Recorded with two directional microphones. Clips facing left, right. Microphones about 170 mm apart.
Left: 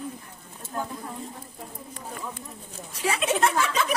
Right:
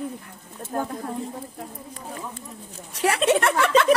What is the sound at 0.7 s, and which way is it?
Speech, 45° right (ahead or behind).